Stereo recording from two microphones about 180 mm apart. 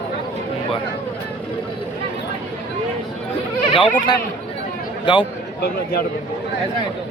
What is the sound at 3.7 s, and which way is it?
Speech, 25° left (ahead or behind).